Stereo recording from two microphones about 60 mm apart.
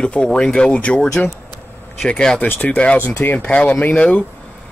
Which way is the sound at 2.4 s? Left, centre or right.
Left.